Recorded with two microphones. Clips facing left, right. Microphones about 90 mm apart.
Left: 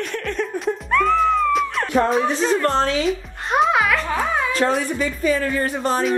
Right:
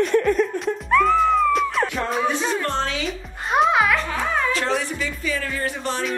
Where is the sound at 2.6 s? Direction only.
40° left (ahead or behind).